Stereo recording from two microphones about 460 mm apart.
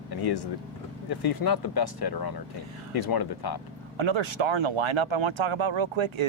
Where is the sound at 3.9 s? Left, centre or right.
Right.